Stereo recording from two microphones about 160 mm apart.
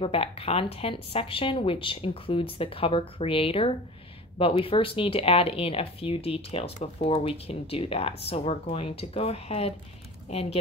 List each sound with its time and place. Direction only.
0.0 s speech: 35° left (ahead or behind)